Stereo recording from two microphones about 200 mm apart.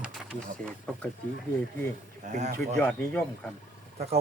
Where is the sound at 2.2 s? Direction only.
35° right (ahead or behind).